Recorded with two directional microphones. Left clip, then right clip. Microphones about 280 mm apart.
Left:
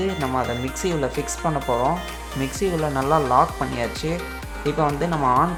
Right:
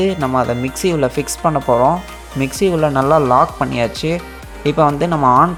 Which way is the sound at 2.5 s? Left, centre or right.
Right.